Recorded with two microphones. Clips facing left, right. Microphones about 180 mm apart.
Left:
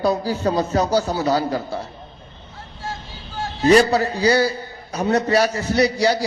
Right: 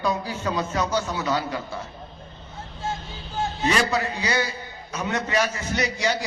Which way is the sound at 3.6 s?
35° left (ahead or behind).